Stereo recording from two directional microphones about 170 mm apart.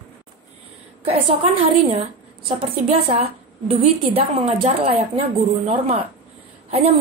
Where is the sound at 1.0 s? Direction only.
35° right (ahead or behind).